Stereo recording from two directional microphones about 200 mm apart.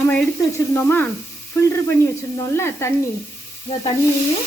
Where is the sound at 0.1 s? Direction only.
10° left (ahead or behind).